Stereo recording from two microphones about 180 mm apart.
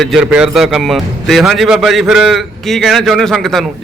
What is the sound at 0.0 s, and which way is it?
A man's voice, 5° right (ahead or behind).